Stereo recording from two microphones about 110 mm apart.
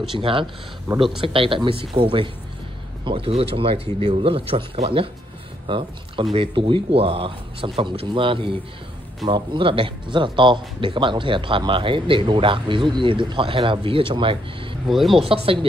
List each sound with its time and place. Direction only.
0.1 s speech: 50° right (ahead or behind)
0.9 s speech: 30° right (ahead or behind)
1.2 s speech: 55° right (ahead or behind)
14.9 s speech: centre (ahead or behind)
15.2 s speech: 60° right (ahead or behind)